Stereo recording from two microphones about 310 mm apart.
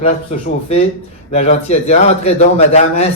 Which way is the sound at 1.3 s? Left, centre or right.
Left.